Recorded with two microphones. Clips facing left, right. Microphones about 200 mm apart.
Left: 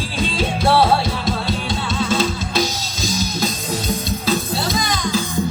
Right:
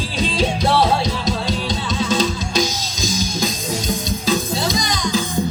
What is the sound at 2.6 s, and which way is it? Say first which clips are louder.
Music: even; 45° right (ahead or behind).